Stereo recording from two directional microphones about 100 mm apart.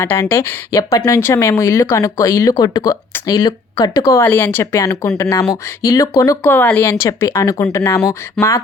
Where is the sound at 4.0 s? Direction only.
30° left (ahead or behind).